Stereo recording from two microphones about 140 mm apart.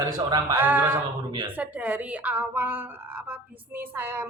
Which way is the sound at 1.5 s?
10° right (ahead or behind).